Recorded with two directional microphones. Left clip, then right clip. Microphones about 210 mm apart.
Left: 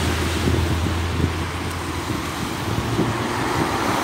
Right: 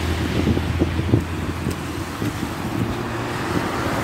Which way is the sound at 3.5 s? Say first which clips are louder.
Left 2 dB; 30° left (ahead or behind).